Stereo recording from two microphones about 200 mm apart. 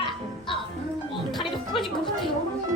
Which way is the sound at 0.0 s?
25° left (ahead or behind).